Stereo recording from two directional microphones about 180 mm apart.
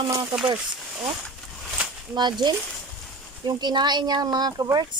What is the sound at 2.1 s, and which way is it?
Speech, 25° right (ahead or behind).